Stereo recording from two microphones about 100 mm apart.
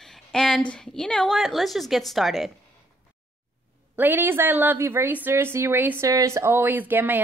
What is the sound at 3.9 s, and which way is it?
A woman's voice, 20° right (ahead or behind).